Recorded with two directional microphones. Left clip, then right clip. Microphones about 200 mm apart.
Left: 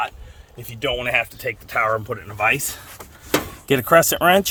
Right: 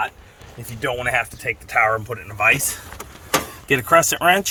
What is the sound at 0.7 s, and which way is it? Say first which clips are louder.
Speech: even; 35° left (ahead or behind).